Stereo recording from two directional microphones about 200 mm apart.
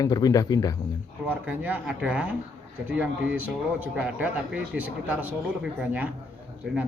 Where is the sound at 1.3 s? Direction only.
10° right (ahead or behind).